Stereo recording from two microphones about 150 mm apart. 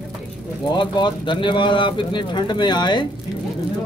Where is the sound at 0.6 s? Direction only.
30° left (ahead or behind).